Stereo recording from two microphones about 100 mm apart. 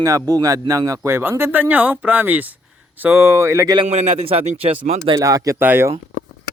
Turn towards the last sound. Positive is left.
turn(degrees=-20)  # may be behind; listen again after turning